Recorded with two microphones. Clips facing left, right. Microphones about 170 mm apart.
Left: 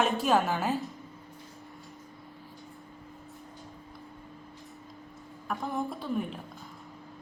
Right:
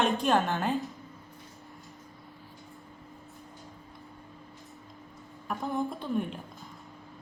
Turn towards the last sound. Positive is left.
turn(degrees=5)  # may be behind; listen again after turning